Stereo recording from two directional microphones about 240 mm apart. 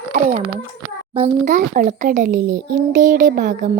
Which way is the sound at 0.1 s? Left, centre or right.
Right.